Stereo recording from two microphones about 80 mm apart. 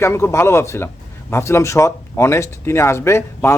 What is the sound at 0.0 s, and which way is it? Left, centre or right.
Speech, left.